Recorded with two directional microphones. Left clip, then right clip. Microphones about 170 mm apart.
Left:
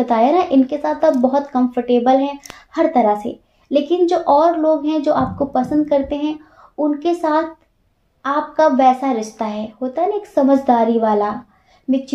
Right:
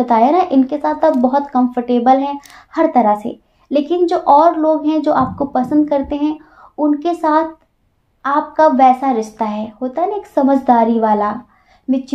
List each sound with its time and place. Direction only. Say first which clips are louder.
0.0 s speech: right 2 dB; 30° right (ahead or behind)